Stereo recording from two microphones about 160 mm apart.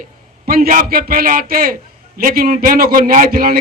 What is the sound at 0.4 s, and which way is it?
A man's voice, 65° right (ahead or behind).